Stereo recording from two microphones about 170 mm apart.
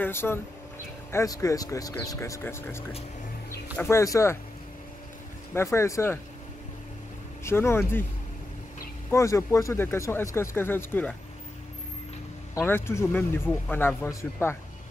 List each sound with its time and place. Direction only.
0.0 s speech: 15° left (ahead or behind)
5.5 s speech: 15° left (ahead or behind)
7.4 s speech: 15° left (ahead or behind)
9.1 s speech: 15° left (ahead or behind)
12.5 s speech: 15° left (ahead or behind)